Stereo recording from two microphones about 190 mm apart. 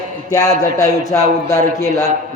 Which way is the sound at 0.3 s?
20° left (ahead or behind).